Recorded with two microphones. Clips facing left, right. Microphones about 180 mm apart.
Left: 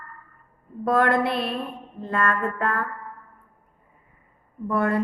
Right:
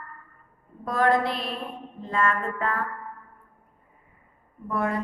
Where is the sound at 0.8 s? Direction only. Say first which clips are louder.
Left 2 dB; 60° left (ahead or behind).